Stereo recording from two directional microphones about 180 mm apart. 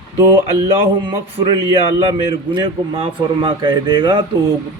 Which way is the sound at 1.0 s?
30° right (ahead or behind).